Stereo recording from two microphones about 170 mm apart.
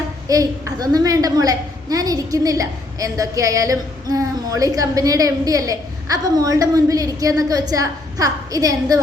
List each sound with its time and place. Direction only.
0.3 s a woman's voice: 20° right (ahead or behind)